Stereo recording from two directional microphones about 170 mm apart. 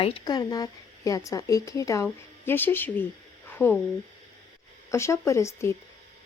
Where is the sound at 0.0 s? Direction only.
30° left (ahead or behind); by 3.8 s 10° left (ahead or behind).